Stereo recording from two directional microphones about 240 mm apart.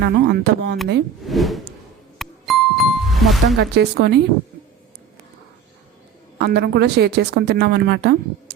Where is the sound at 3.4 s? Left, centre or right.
Right.